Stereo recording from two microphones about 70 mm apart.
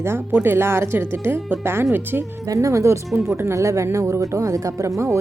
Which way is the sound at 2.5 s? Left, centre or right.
Right.